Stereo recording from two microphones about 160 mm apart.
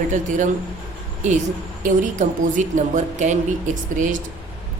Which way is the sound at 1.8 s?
50° right (ahead or behind).